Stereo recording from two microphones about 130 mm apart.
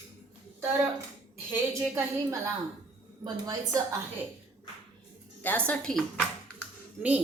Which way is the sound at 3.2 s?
30° right (ahead or behind).